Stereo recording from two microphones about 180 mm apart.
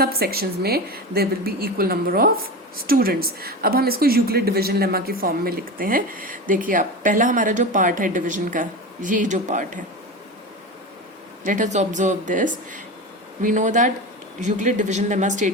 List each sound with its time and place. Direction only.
0.0 s a woman's voice: 55° right (ahead or behind)
11.4 s speech: 45° right (ahead or behind)